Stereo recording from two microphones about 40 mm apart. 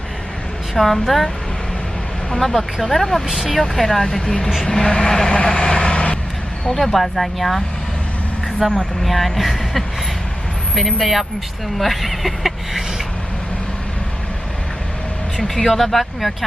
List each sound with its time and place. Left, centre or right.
0.7 s speech: centre
2.3 s speech: centre
3.2 s speech: centre
3.8 s speech: centre
5.9 s vehicle: left
6.7 s speech: centre
8.7 s speech: centre
11.0 s speech: centre
15.4 s speech: centre